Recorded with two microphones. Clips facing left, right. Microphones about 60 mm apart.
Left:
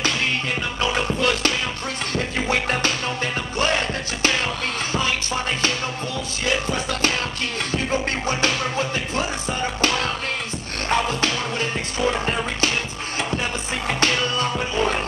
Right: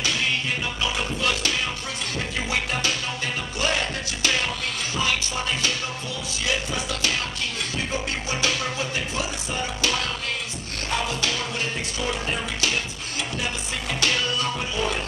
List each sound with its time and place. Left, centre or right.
0.8 s music: left
6.4 s music: left